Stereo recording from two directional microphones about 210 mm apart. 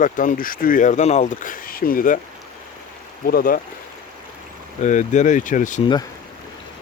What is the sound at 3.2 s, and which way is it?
Speech, 45° left (ahead or behind).